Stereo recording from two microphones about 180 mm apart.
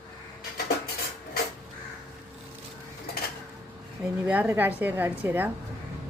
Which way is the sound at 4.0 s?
5° right (ahead or behind).